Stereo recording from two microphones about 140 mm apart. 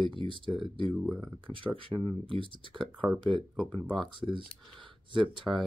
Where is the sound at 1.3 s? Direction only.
40° right (ahead or behind).